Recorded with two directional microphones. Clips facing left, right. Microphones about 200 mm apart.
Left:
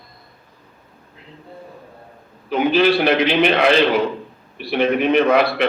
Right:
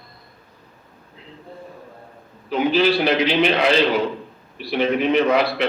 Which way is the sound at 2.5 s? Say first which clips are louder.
Left 2 dB; 60° left (ahead or behind).